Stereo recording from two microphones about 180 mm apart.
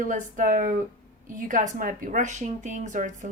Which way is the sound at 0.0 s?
50° right (ahead or behind).